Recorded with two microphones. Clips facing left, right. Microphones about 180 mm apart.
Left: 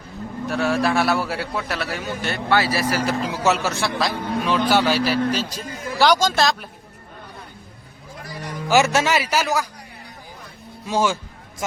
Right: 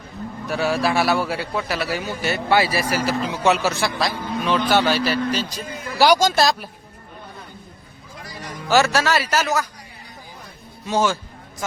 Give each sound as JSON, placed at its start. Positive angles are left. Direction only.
{"t": 0.4, "sound": "a man's voice", "side_deg": 0}
{"t": 3.2, "sound": "a man's voice", "side_deg": 0}
{"t": 6.0, "sound": "speech", "side_deg": -10}
{"t": 8.7, "sound": "speech", "side_deg": 20}
{"t": 10.8, "sound": "speech", "side_deg": 10}